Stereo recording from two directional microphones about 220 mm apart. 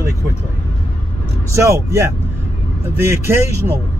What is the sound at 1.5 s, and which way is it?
Speech, 15° right (ahead or behind).